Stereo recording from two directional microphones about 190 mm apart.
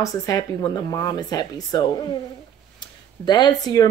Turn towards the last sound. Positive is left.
turn(degrees=20)  # may be behind; listen again after turning